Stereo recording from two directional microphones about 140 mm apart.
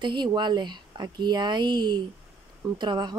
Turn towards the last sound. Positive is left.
turn(degrees=-30)  # may be behind; listen again after turning